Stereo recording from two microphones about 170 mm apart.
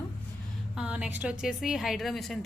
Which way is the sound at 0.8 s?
5° right (ahead or behind).